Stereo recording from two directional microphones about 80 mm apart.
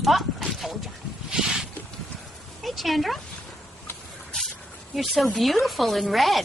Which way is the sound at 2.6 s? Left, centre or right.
Centre.